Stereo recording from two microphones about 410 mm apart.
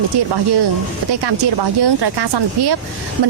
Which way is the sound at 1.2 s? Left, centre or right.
Right.